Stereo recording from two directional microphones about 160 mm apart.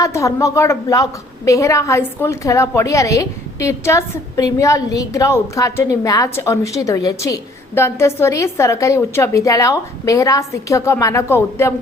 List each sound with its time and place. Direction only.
0.0 s a woman's voice: 20° left (ahead or behind)